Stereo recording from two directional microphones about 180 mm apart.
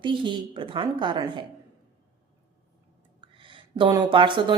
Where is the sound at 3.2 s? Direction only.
30° right (ahead or behind).